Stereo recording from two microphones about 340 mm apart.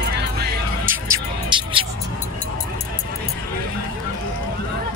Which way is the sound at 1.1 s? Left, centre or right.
Centre.